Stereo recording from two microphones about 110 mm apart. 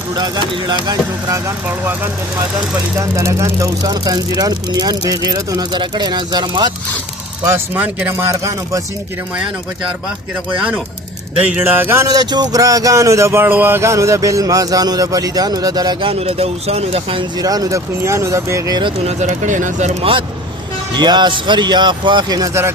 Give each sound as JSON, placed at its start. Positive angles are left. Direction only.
{"t": 0.5, "sound": "speech", "side_deg": -40}
{"t": 1.6, "sound": "speech", "side_deg": -20}
{"t": 3.0, "sound": "speech", "side_deg": -25}
{"t": 7.5, "sound": "speech", "side_deg": -20}
{"t": 11.5, "sound": "speech", "side_deg": -20}
{"t": 12.0, "sound": "speech", "side_deg": -35}
{"t": 16.0, "sound": "speech", "side_deg": -55}
{"t": 17.3, "sound": "speech", "side_deg": -35}
{"t": 19.0, "sound": "speech", "side_deg": -90}
{"t": 20.9, "sound": "speech", "side_deg": -45}